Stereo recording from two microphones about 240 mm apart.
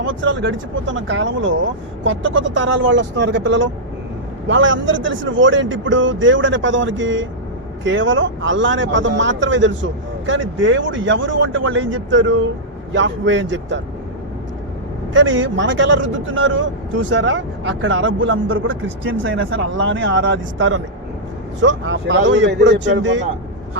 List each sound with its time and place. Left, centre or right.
0.0 s a man's voice: right
15.1 s a man's voice: right